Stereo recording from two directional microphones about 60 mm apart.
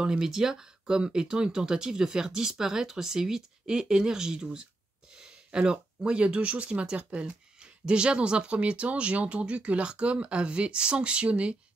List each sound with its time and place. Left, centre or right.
0.0 s speech: centre